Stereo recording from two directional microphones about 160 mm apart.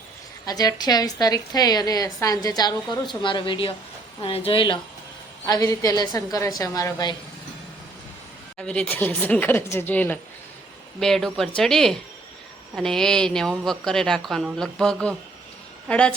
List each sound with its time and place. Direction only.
0.4 s a woman's voice: 25° left (ahead or behind)
5.5 s a woman's voice: 20° left (ahead or behind)
8.5 s speech: 5° left (ahead or behind)